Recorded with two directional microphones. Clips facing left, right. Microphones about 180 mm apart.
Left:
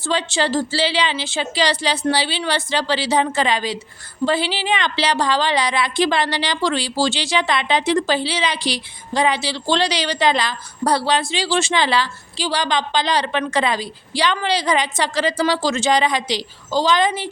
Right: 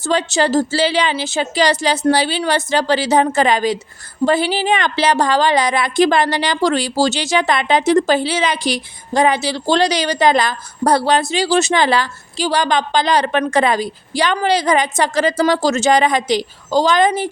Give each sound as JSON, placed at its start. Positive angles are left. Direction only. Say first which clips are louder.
{"t": 0.0, "sound": "a woman's voice", "louder": "right 4 dB", "side_deg": -45}